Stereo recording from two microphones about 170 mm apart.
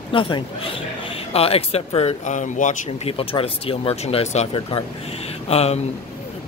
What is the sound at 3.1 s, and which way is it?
Speech, 35° left (ahead or behind).